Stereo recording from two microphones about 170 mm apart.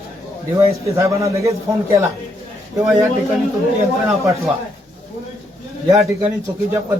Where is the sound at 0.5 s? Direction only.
15° right (ahead or behind).